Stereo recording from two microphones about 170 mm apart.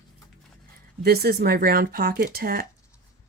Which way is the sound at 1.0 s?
65° right (ahead or behind).